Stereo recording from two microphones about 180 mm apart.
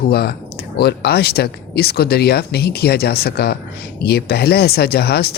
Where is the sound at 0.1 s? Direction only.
65° left (ahead or behind).